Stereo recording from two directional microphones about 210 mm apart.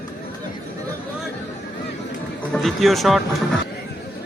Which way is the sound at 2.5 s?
Centre (ahead or behind).